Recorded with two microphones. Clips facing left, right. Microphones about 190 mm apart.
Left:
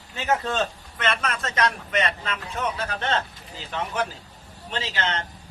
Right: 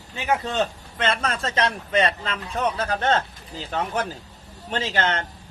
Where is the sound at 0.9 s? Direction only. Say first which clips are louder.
Right 2 dB; 30° right (ahead or behind); by 5.2 s 50° right (ahead or behind).